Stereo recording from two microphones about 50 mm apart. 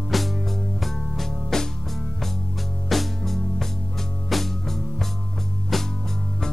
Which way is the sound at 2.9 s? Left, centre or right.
Centre.